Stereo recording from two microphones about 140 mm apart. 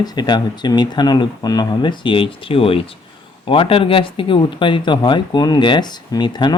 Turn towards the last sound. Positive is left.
turn(degrees=30)  # may be behind; listen again after turning